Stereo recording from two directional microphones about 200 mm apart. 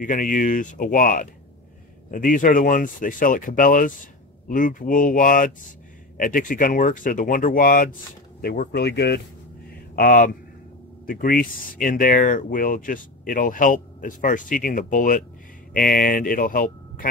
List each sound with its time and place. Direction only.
0.0 s speech: 40° left (ahead or behind)
9.9 s speech: 45° left (ahead or behind)